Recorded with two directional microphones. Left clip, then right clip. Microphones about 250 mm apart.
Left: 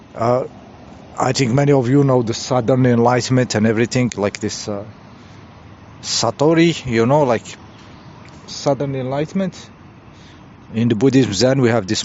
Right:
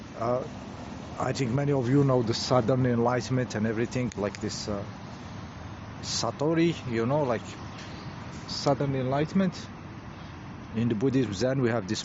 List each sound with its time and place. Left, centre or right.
0.2 s speech: left
6.0 s speech: left
10.8 s speech: left